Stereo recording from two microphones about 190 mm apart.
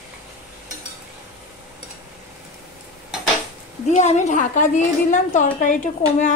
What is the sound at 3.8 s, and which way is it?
A woman's voice, 40° left (ahead or behind).